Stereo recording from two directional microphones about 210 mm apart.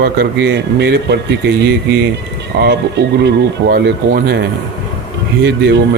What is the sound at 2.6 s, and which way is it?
Speech, 50° right (ahead or behind).